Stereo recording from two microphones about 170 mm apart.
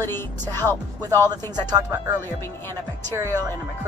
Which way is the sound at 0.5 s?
20° right (ahead or behind).